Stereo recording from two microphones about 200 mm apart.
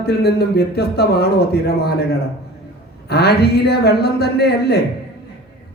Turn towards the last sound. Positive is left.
turn(degrees=55)  # may be behind; listen again after turning